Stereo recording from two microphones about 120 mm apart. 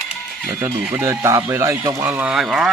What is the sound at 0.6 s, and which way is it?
Speech, 20° right (ahead or behind).